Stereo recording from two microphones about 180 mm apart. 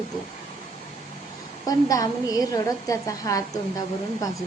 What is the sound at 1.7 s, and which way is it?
A woman's voice, 20° left (ahead or behind).